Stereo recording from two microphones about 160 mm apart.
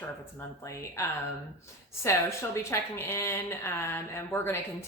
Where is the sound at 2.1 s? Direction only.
15° left (ahead or behind).